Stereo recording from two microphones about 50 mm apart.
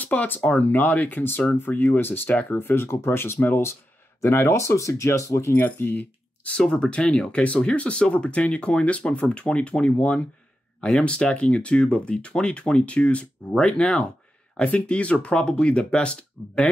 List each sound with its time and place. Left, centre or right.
0.0 s speech: left
4.6 s speech: left
5.5 s speech: left
6.4 s speech: centre